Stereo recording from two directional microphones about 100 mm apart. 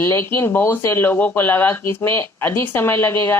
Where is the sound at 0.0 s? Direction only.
25° left (ahead or behind).